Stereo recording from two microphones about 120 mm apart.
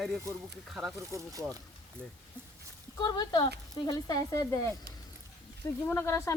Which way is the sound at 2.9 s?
40° left (ahead or behind).